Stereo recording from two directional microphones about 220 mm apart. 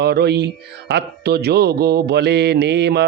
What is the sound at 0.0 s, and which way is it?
Speech, 50° right (ahead or behind).